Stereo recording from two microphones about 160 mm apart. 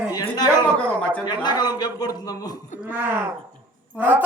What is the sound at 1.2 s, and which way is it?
A man's voice, 25° left (ahead or behind).